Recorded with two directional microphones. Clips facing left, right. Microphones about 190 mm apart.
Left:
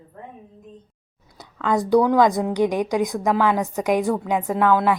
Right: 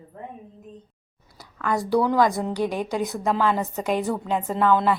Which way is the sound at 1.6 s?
20° left (ahead or behind).